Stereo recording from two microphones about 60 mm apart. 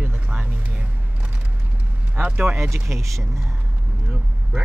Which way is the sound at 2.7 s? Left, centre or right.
Right.